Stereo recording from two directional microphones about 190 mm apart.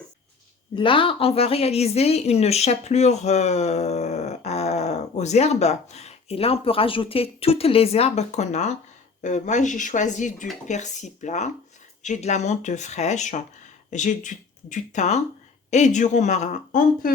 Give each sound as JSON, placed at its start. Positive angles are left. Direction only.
{"t": 0.8, "sound": "a woman's voice", "side_deg": 25}